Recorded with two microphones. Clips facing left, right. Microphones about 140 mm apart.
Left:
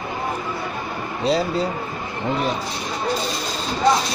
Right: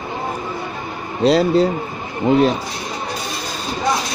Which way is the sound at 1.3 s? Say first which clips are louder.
Right 7 dB; 75° right (ahead or behind).